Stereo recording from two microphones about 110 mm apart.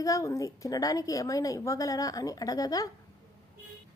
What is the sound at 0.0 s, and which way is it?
A woman's voice, 30° left (ahead or behind).